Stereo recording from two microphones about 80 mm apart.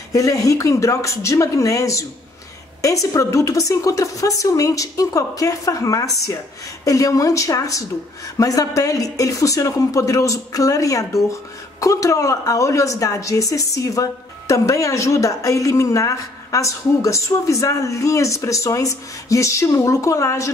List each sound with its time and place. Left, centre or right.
0.1 s a woman's voice: left